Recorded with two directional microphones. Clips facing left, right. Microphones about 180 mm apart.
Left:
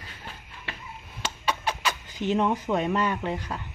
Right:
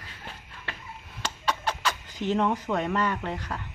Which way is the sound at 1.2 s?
15° left (ahead or behind).